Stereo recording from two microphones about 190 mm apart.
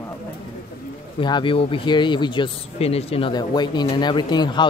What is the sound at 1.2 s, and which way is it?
Speech, 25° left (ahead or behind).